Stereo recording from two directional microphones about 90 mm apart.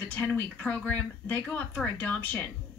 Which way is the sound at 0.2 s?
20° left (ahead or behind).